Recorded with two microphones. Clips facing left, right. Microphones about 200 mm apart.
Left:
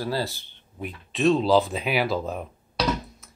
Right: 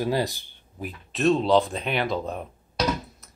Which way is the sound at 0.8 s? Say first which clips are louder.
Left 1 dB; centre (ahead or behind).